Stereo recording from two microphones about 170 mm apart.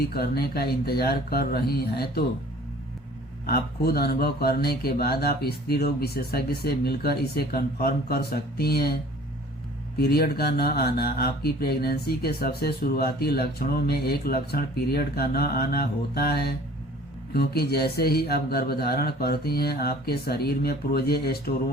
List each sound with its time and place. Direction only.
0.1 s speech: 65° left (ahead or behind)
3.4 s speech: 65° left (ahead or behind)
10.0 s speech: 65° left (ahead or behind)